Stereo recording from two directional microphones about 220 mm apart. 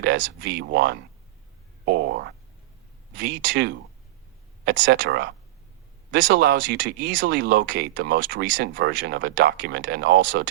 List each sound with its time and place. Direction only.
0.0 s speech: 50° right (ahead or behind)
1.8 s boing: 45° right (ahead or behind)
3.2 s speech: 55° right (ahead or behind)
4.8 s speech: 50° right (ahead or behind)
7.1 s speech: 40° right (ahead or behind)